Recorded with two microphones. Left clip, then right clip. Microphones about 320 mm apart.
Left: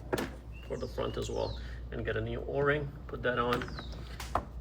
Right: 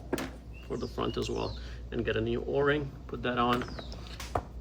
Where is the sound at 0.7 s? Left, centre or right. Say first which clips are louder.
Right 2 dB; centre.